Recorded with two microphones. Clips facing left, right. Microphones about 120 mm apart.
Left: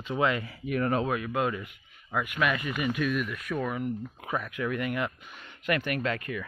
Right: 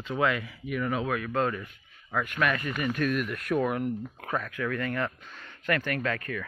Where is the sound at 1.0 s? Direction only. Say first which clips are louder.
Even; 20° left (ahead or behind); by 3.9 s 5° right (ahead or behind).